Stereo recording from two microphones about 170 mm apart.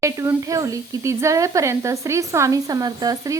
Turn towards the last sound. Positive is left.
turn(degrees=-20)  # may be behind; listen again after turning